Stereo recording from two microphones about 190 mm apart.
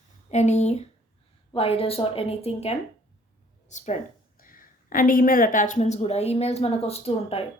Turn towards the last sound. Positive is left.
turn(degrees=30)  # may be behind; listen again after turning